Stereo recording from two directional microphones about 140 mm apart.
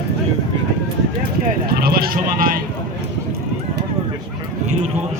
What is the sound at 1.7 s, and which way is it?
Sheep, 90° right.